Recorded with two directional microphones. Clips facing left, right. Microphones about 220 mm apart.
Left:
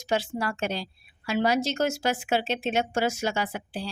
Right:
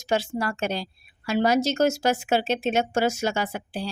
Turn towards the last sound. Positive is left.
turn(degrees=-45)  # may be behind; listen again after turning